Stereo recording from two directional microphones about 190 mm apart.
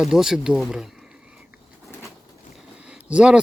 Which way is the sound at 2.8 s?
5° right (ahead or behind).